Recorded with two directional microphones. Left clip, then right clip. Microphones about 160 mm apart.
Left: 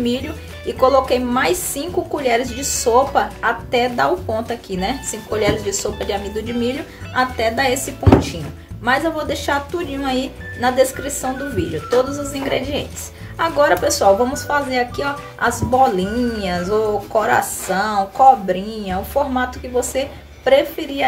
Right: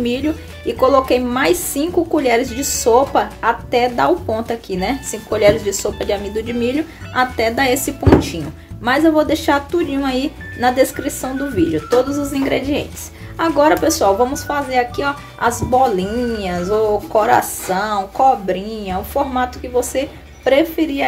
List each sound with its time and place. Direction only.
0.0 s speech: 40° right (ahead or behind)